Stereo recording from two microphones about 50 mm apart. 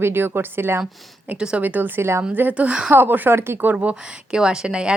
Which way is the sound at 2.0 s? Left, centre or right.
Right.